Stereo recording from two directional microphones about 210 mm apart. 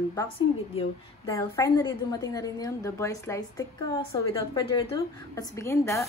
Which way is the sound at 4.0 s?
25° left (ahead or behind).